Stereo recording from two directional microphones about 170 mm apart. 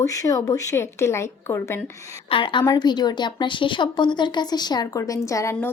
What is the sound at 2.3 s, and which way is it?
A woman's voice, 30° left (ahead or behind).